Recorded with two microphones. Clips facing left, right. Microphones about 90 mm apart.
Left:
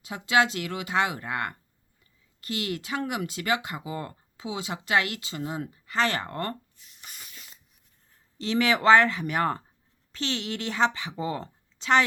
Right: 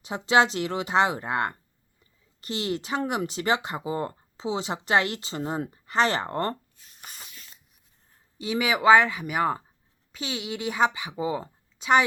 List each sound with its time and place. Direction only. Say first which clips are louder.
0.0 s speech: right 3 dB; 30° right (ahead or behind)
8.4 s speech: left 1 dB; 10° right (ahead or behind)